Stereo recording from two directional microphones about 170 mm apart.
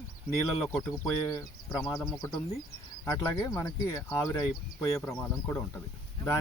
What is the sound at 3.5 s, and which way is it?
Speech, 20° left (ahead or behind).